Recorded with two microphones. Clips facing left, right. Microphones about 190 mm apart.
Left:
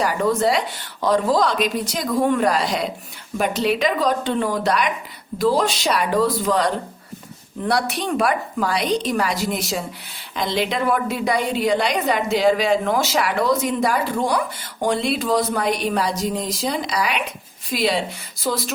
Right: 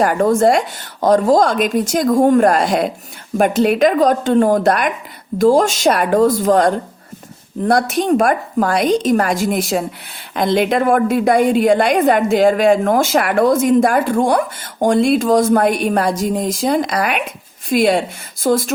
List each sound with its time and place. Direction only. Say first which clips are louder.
0.0 s a woman's voice: right 6 dB; 50° right (ahead or behind)